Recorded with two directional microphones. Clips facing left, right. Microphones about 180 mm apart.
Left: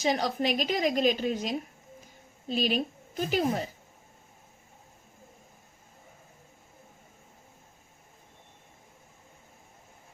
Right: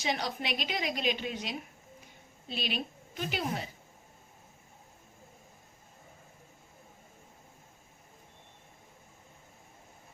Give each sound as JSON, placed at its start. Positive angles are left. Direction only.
{"t": 0.0, "sound": "a woman's voice", "side_deg": 40}